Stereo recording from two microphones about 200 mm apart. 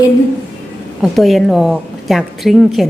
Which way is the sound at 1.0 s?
Centre (ahead or behind).